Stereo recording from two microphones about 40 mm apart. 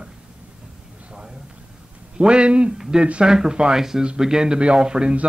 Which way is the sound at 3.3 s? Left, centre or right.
Centre.